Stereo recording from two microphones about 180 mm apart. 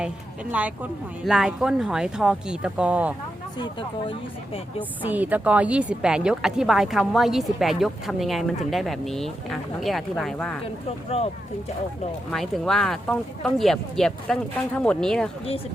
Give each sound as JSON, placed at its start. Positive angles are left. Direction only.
{"t": 0.5, "sound": "a woman's voice", "side_deg": -10}
{"t": 3.6, "sound": "speech", "side_deg": 25}
{"t": 5.0, "sound": "a woman's voice", "side_deg": -10}
{"t": 12.3, "sound": "a woman's voice", "side_deg": 0}